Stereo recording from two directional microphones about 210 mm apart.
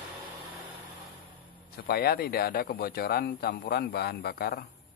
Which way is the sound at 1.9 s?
50° left (ahead or behind).